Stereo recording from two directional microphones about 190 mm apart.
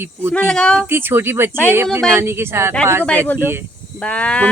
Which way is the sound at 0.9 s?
10° right (ahead or behind).